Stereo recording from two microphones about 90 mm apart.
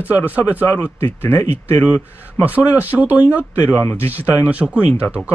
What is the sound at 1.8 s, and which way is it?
Speech, 15° right (ahead or behind).